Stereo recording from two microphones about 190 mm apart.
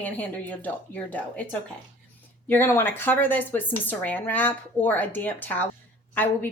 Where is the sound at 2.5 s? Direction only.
10° left (ahead or behind).